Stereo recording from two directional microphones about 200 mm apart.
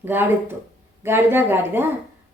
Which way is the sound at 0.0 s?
10° right (ahead or behind).